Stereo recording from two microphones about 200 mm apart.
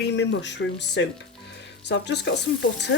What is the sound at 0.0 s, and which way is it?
Speech, 60° left (ahead or behind).